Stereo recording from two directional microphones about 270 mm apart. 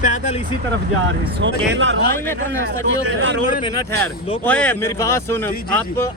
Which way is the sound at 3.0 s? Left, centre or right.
Right.